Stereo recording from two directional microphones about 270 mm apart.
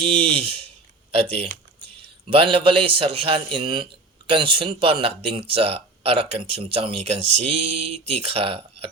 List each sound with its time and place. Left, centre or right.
0.0 s speech: right
2.0 s speech: right